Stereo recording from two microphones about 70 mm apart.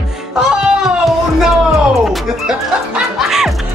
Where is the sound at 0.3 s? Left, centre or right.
Centre.